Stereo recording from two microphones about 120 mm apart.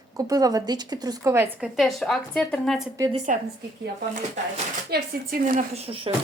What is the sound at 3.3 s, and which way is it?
Speech, 90° right.